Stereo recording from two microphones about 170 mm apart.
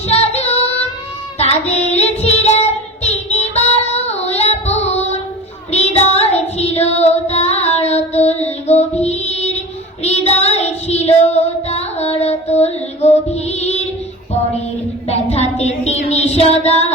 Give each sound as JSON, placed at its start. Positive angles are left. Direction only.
{"t": 0.1, "sound": "female singing", "side_deg": 40}
{"t": 1.4, "sound": "child singing", "side_deg": 40}
{"t": 15.0, "sound": "music", "side_deg": 40}